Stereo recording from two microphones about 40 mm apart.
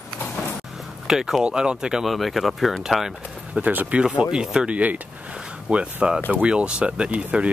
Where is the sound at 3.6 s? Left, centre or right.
Right.